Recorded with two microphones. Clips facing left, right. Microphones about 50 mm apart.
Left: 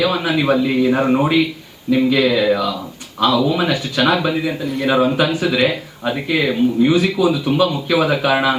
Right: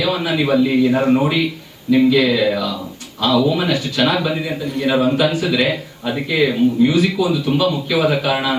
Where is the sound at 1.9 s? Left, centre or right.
Centre.